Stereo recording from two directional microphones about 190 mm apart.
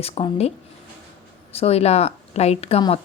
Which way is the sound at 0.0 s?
30° left (ahead or behind).